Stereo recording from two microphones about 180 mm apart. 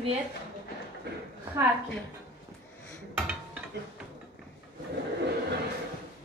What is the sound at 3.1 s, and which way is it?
Dishes, 10° right (ahead or behind).